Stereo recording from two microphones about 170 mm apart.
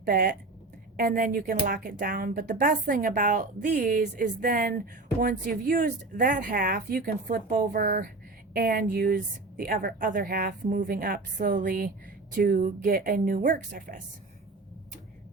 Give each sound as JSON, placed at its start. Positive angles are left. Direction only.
{"t": 0.0, "sound": "a woman's voice", "side_deg": -60}